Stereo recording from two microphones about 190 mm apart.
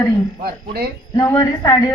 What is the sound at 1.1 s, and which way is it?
Speech, 15° left (ahead or behind).